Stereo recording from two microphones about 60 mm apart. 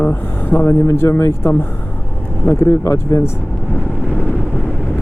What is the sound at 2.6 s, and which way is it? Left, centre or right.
Speech, left.